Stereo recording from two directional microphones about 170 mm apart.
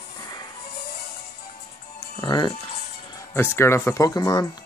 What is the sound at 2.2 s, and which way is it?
Speech, 25° left (ahead or behind).